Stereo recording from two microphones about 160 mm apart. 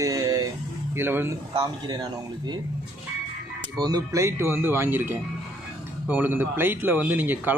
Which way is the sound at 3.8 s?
25° right (ahead or behind).